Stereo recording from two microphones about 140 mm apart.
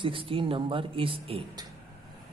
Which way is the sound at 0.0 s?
40° right (ahead or behind).